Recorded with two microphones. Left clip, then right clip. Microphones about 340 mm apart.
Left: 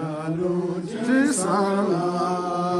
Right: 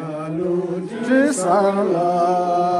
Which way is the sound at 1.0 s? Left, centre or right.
Centre.